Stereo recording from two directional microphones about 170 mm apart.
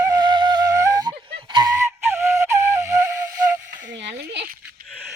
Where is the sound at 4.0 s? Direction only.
90° right.